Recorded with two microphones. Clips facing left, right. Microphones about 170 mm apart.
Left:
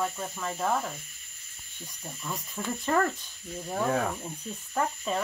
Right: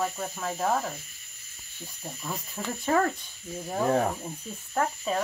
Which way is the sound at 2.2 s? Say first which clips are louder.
Even; 25° right (ahead or behind).